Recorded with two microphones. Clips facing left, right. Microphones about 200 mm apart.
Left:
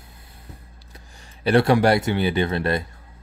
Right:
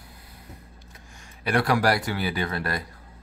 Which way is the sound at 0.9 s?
30° left (ahead or behind).